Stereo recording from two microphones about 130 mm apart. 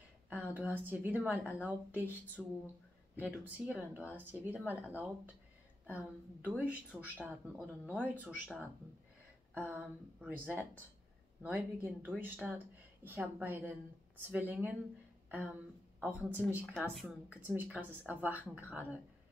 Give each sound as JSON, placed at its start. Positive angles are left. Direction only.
{"t": 0.3, "sound": "a woman's voice", "side_deg": -15}
{"t": 9.5, "sound": "a woman's voice", "side_deg": -15}
{"t": 16.1, "sound": "speech", "side_deg": 20}
{"t": 16.7, "sound": "speech", "side_deg": 0}
{"t": 17.3, "sound": "a woman's voice", "side_deg": -15}